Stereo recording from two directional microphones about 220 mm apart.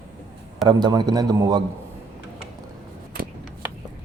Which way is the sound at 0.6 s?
20° right (ahead or behind).